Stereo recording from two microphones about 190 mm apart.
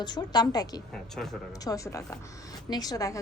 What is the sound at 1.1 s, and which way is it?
Speech, centre (ahead or behind).